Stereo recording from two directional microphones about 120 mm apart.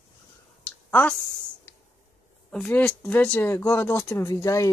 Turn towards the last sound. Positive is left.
turn(degrees=25)  # may be behind; listen again after turning